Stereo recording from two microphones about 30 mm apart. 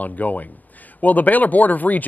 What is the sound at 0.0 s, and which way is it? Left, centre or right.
Speech, left.